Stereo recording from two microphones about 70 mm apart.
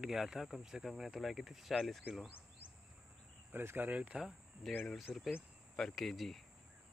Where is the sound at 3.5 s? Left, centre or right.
Right.